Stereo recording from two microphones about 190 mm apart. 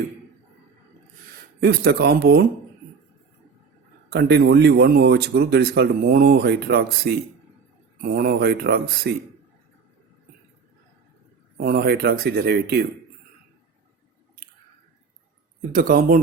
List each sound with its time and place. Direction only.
1.6 s speech: 55° right (ahead or behind)
4.1 s speech: 60° right (ahead or behind)
11.5 s speech: 55° right (ahead or behind)
15.7 s speech: 45° right (ahead or behind)